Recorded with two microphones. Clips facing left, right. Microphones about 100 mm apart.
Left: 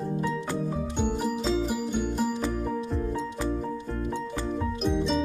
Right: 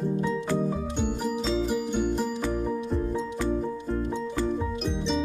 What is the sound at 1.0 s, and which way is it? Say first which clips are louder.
Music: left 1 dB; 5° left (ahead or behind).